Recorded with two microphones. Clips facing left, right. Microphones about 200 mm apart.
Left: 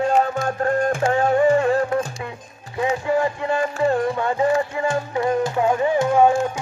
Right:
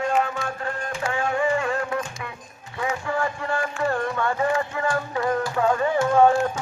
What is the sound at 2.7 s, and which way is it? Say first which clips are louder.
Speech: left 6 dB; 20° left (ahead or behind).